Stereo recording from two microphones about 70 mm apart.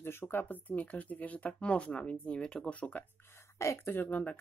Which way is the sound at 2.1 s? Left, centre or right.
Centre.